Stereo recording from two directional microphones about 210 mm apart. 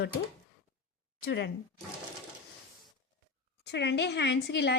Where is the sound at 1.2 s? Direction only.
55° left (ahead or behind).